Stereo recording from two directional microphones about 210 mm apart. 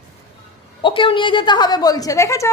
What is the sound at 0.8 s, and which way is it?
A woman's voice, 25° left (ahead or behind).